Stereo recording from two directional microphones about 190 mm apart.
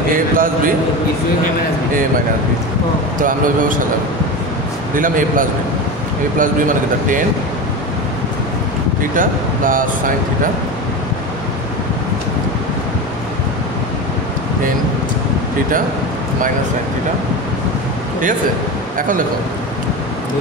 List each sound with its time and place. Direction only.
0.1 s speech: 45° right (ahead or behind)
3.3 s speech: 45° right (ahead or behind)
4.9 s speech: 45° right (ahead or behind)
9.1 s speech: 45° right (ahead or behind)
18.9 s speech: 45° right (ahead or behind)